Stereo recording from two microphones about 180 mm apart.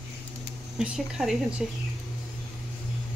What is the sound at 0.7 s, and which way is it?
Speech, 5° right (ahead or behind).